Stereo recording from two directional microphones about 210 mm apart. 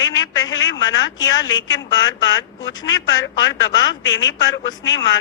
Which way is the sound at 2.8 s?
60° left (ahead or behind).